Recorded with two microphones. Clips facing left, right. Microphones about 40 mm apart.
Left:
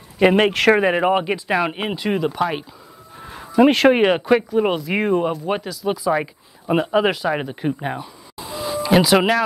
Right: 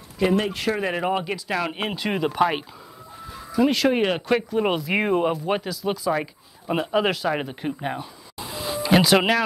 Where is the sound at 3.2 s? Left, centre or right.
Left.